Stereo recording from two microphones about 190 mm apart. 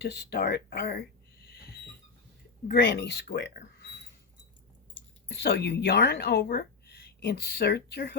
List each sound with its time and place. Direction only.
0.0 s speech: 60° left (ahead or behind)
1.5 s a sound: 55° left (ahead or behind)
2.6 s speech: 60° left (ahead or behind)
5.3 s speech: 65° left (ahead or behind)